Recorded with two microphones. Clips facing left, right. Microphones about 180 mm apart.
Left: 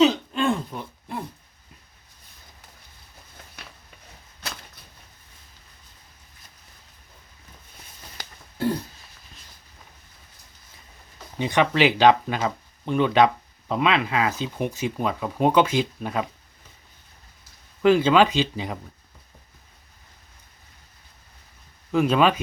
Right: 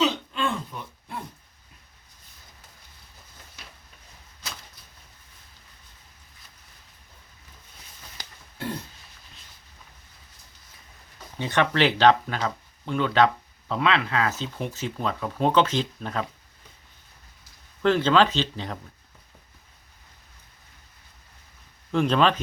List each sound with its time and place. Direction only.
0.0 s a sound: 40° left (ahead or behind)
4.4 s a sound: 60° left (ahead or behind)
8.5 s throat clearing: 35° left (ahead or behind)
11.3 s speech: 15° left (ahead or behind)
17.8 s speech: 10° left (ahead or behind)
21.9 s speech: 5° left (ahead or behind)